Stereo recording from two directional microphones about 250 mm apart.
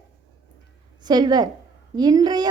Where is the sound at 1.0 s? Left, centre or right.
Centre.